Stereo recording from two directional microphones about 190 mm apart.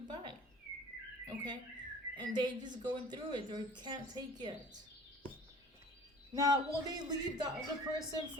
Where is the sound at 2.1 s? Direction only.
20° right (ahead or behind).